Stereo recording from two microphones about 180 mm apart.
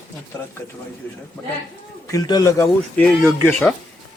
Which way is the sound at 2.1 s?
20° left (ahead or behind).